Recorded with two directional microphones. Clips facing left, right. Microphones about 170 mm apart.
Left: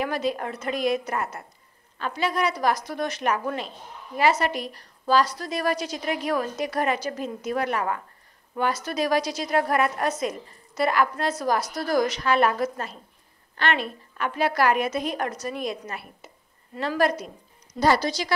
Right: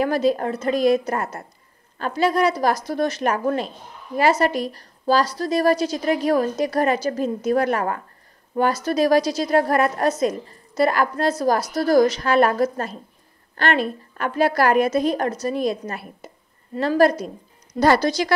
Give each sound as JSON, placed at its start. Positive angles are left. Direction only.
{"t": 0.0, "sound": "a woman's voice", "side_deg": -35}
{"t": 17.7, "sound": "speech", "side_deg": -55}